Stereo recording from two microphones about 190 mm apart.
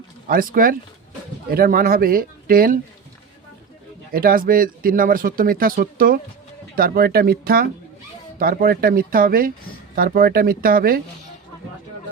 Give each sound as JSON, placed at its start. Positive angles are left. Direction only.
{"t": 0.3, "sound": "speech", "side_deg": -50}
{"t": 4.1, "sound": "speech", "side_deg": -50}